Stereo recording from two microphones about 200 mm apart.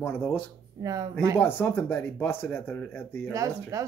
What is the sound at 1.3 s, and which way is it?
Speech, 10° left (ahead or behind).